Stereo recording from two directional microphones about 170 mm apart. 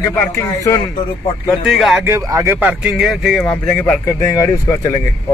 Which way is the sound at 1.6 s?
Centre (ahead or behind).